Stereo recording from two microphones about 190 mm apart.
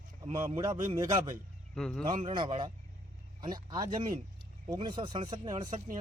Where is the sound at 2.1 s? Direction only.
40° right (ahead or behind).